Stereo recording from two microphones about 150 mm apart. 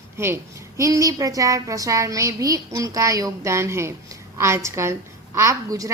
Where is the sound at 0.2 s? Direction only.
15° right (ahead or behind).